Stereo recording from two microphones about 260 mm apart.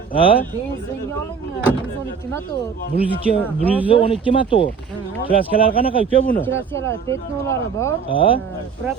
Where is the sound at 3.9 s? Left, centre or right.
Centre.